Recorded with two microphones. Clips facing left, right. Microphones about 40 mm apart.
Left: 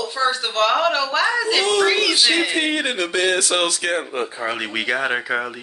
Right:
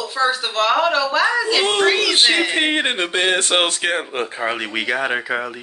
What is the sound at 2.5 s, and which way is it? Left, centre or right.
Speech, right.